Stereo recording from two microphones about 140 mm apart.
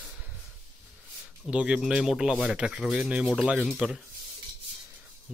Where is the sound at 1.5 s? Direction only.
5° right (ahead or behind).